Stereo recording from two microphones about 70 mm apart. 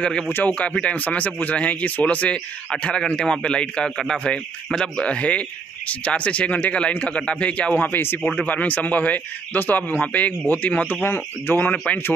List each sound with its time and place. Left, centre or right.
0.3 s speech: left
8.2 s speech: centre
8.5 s speech: left
11.7 s speech: centre